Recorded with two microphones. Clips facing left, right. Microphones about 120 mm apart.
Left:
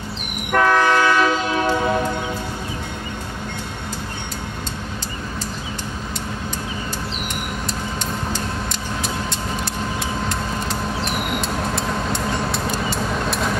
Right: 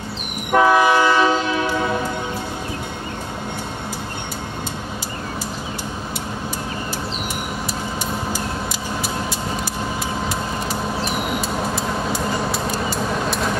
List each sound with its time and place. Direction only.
0.5 s train: 15° right (ahead or behind)
10.2 s vehicle: 5° right (ahead or behind)